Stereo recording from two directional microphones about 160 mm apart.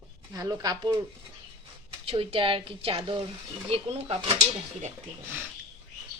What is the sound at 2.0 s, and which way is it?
Speech, 35° right (ahead or behind).